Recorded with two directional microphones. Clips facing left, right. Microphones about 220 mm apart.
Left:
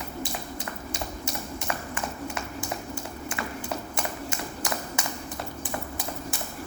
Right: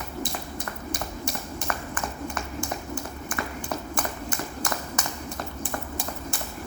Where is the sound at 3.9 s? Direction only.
25° left (ahead or behind).